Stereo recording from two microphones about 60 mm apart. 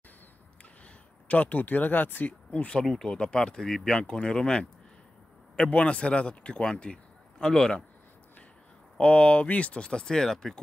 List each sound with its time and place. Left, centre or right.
1.2 s speech: left
2.5 s speech: left
2.8 s speech: centre
8.9 s speech: centre